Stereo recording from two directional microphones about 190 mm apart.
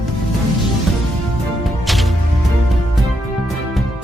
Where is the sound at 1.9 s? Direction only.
Centre (ahead or behind).